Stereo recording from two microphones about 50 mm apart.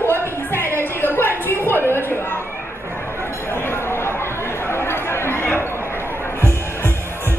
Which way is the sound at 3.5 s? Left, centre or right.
Left.